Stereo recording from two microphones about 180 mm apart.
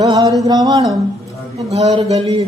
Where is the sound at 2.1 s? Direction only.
20° right (ahead or behind).